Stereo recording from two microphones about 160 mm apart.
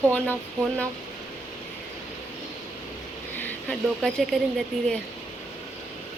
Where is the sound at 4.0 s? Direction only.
Centre (ahead or behind).